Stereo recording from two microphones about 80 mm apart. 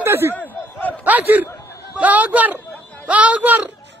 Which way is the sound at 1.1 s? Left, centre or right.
Right.